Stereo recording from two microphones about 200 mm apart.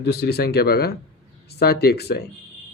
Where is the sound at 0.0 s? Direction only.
55° left (ahead or behind).